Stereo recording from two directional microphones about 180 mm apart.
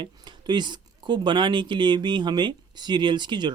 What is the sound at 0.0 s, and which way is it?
Speech, 25° right (ahead or behind).